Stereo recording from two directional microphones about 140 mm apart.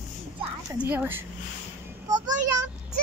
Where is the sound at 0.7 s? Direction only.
10° right (ahead or behind).